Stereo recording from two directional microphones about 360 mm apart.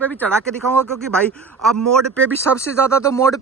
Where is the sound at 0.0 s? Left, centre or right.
Centre.